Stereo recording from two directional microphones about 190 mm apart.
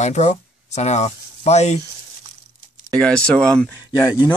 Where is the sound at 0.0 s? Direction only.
35° left (ahead or behind).